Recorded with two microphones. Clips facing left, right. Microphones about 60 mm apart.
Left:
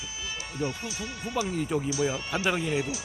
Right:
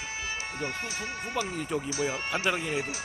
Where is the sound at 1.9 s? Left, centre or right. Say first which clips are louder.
Left 2 dB; right.